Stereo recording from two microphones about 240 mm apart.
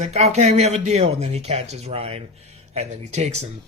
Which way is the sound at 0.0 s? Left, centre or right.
Right.